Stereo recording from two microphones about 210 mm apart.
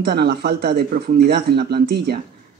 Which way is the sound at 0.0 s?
50° right (ahead or behind).